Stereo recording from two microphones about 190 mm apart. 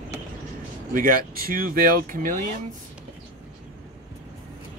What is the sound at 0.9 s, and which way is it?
Speech, 45° right (ahead or behind).